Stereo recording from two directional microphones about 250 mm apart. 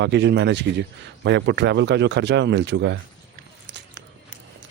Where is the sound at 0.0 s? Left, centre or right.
Right.